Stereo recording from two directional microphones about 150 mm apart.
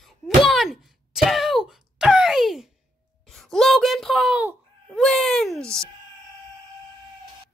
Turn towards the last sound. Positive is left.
turn(degrees=5)  # may be behind; listen again after turning